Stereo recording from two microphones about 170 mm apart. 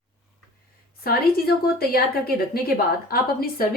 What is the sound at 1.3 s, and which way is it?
A woman's voice, 65° left (ahead or behind).